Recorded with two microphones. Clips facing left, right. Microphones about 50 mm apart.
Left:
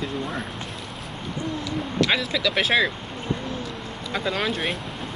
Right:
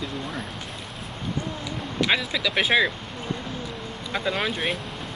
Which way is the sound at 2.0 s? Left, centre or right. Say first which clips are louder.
Even; centre.